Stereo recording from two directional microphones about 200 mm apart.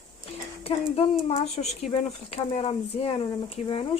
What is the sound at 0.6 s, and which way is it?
Speech, 30° left (ahead or behind).